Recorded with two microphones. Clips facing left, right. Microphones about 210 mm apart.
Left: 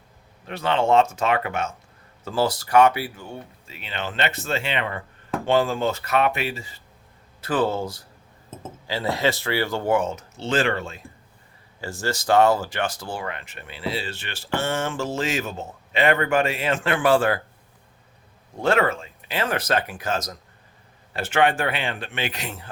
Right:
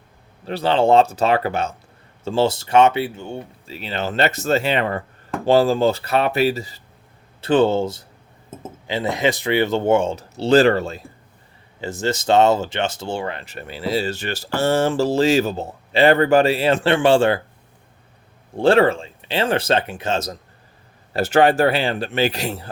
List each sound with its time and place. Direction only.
0.4 s speech: 35° right (ahead or behind)
7.4 s speech: 25° right (ahead or behind)
11.8 s speech: 20° right (ahead or behind)
18.5 s speech: 30° right (ahead or behind)
21.1 s speech: 40° right (ahead or behind)